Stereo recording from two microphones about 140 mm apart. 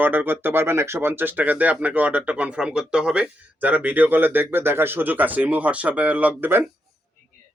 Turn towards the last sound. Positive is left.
turn(degrees=-10)  # may be behind; listen again after turning